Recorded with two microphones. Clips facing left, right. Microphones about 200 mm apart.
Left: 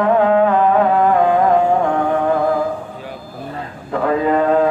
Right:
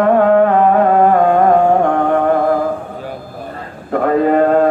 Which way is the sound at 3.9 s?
55° right (ahead or behind).